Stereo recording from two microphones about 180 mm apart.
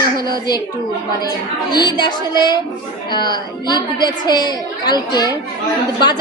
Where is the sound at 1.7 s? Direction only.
25° left (ahead or behind).